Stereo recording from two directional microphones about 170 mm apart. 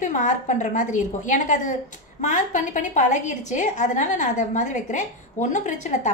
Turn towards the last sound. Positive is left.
turn(degrees=45)  # may be behind; listen again after turning